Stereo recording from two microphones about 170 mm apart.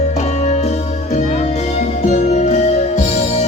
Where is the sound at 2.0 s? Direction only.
45° left (ahead or behind).